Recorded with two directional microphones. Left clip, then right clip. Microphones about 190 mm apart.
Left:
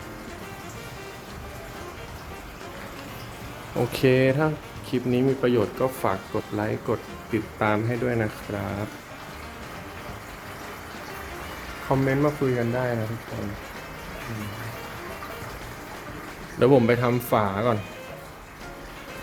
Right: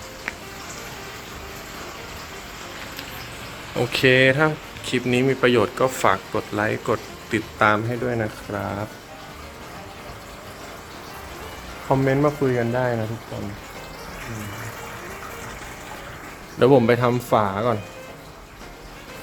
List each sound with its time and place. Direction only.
3.8 s speech: 5° left (ahead or behind)
11.9 s speech: 20° right (ahead or behind)
16.6 s speech: 10° right (ahead or behind)